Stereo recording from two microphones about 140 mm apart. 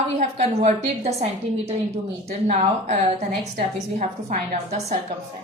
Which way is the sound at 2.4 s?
55° right (ahead or behind).